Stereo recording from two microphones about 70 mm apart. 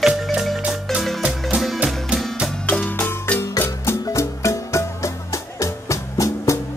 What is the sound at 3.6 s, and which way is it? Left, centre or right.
Music, left.